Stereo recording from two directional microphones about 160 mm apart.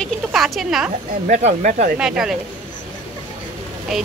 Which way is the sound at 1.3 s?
50° right (ahead or behind).